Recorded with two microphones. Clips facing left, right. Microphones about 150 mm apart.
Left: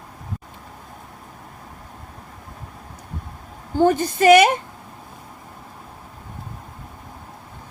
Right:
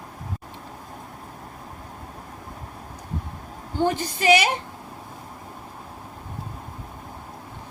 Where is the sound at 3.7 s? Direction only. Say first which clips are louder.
Left 7 dB; 50° left (ahead or behind).